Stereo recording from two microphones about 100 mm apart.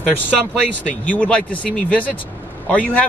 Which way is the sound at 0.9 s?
15° left (ahead or behind).